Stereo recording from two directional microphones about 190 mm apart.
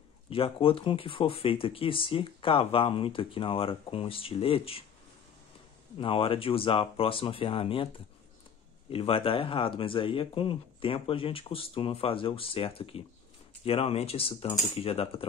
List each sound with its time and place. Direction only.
0.3 s speech: 30° left (ahead or behind)
5.9 s speech: 30° left (ahead or behind)
8.9 s speech: 30° left (ahead or behind)